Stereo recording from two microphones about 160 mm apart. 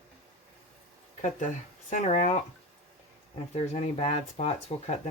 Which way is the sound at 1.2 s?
50° left (ahead or behind).